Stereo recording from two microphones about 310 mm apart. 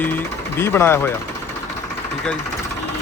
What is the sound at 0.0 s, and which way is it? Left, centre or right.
Speech, centre.